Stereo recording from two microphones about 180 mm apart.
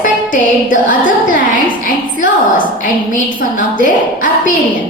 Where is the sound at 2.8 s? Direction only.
45° left (ahead or behind).